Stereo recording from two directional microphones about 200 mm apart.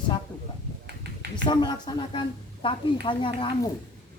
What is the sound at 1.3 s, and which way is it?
A man's voice, 20° left (ahead or behind).